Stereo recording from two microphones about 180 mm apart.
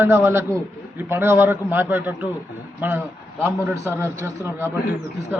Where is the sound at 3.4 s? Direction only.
15° right (ahead or behind).